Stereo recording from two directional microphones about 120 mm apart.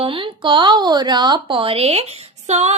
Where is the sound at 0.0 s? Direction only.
45° right (ahead or behind).